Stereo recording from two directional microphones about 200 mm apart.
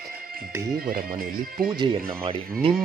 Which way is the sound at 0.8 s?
45° right (ahead or behind).